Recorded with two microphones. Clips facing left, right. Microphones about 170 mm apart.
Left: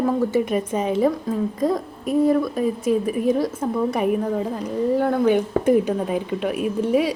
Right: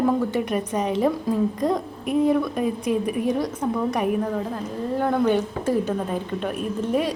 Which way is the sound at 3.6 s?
5° left (ahead or behind).